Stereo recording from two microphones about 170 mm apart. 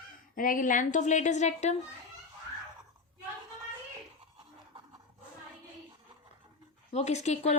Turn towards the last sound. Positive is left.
turn(degrees=40)  # may be behind; listen again after turning